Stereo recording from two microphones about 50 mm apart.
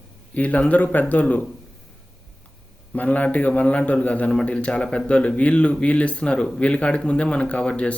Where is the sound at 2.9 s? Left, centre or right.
Left.